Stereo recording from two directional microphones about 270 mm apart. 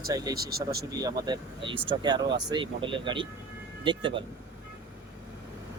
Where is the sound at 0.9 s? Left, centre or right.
Centre.